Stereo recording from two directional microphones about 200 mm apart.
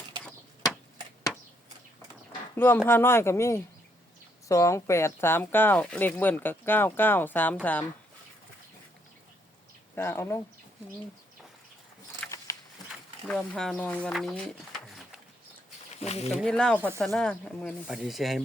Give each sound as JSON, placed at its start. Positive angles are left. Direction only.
{"t": 2.6, "sound": "speech", "side_deg": 10}
{"t": 9.9, "sound": "speech", "side_deg": 10}
{"t": 12.2, "sound": "a sound", "side_deg": 5}
{"t": 12.8, "sound": "a sound", "side_deg": 20}
{"t": 13.2, "sound": "speech", "side_deg": 5}
{"t": 16.0, "sound": "speech", "side_deg": 30}
{"t": 16.3, "sound": "speech", "side_deg": 0}